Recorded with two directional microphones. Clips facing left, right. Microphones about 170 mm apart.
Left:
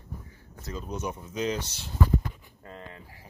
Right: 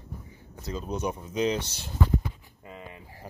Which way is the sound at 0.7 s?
20° right (ahead or behind).